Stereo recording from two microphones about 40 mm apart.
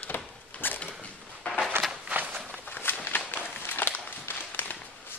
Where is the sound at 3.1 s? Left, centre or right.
Left.